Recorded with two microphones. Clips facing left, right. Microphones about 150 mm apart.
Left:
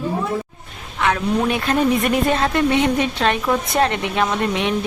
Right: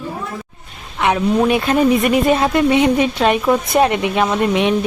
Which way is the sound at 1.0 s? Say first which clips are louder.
Right 4 dB; 15° right (ahead or behind).